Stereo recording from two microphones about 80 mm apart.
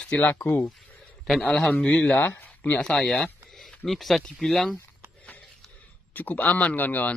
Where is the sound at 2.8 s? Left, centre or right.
Centre.